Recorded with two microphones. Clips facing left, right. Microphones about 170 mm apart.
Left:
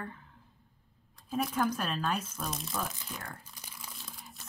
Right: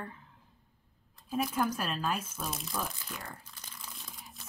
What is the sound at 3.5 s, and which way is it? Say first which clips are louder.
Crumpling: left 1 dB; 10° left (ahead or behind).